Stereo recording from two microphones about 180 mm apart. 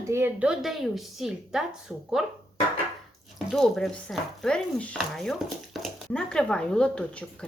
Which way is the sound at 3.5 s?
Centre (ahead or behind).